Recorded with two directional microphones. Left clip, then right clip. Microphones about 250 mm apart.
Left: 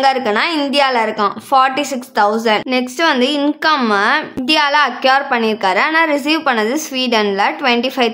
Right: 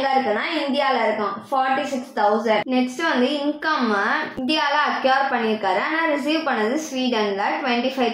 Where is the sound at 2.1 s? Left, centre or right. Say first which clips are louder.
Left 5 dB; left.